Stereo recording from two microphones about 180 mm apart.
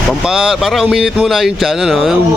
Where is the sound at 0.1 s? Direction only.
Centre (ahead or behind).